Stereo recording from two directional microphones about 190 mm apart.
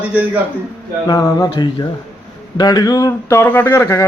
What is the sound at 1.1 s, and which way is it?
A man's voice, 20° left (ahead or behind).